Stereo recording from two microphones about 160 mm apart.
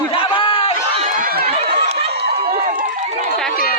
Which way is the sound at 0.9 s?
50° right (ahead or behind).